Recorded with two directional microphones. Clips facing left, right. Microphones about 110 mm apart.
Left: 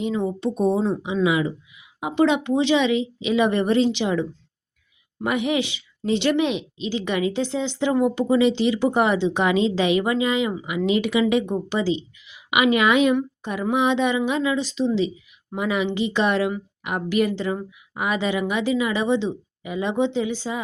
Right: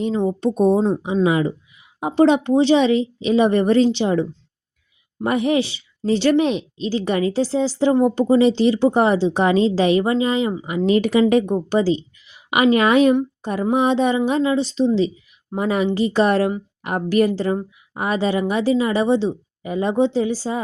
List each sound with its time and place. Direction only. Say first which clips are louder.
0.0 s a woman's voice: right 4 dB; 35° right (ahead or behind)